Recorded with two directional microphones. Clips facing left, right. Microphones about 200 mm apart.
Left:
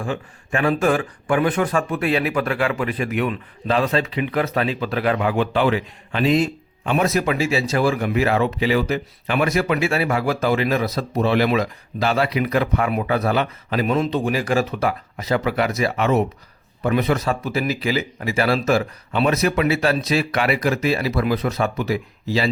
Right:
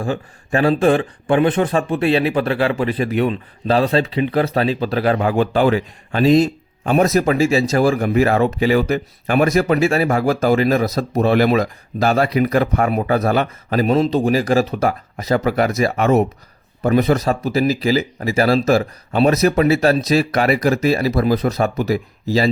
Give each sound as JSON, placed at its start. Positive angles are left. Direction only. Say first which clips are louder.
{"t": 0.0, "sound": "speech", "louder": "right 4 dB", "side_deg": -35}